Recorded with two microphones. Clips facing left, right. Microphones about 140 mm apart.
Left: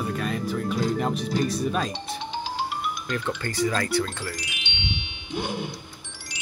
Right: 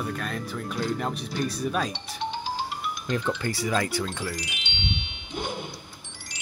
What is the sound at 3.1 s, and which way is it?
Speech, 15° right (ahead or behind).